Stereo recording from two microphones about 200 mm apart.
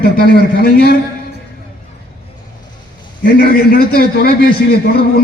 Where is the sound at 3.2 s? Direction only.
50° left (ahead or behind).